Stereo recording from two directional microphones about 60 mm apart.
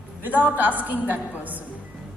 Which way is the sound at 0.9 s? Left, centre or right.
Right.